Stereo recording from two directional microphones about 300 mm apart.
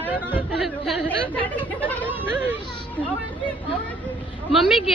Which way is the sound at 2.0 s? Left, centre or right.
Centre.